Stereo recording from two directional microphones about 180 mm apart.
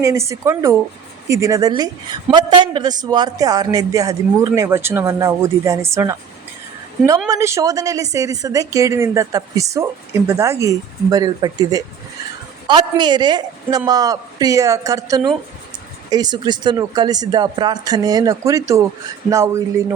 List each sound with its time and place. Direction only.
0.0 s a woman's voice: 15° right (ahead or behind)
7.3 s a woman's voice: 15° right (ahead or behind)